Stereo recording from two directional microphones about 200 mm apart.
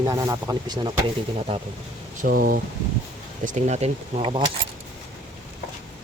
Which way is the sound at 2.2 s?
45° right (ahead or behind).